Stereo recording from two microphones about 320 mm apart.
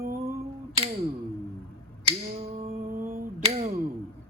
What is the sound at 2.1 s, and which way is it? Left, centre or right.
Finger snapping, centre.